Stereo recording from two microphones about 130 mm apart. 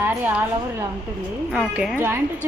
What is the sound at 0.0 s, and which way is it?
Speech, 15° right (ahead or behind).